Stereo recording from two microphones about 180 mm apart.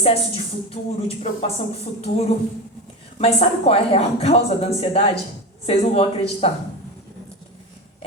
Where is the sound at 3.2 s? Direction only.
35° left (ahead or behind).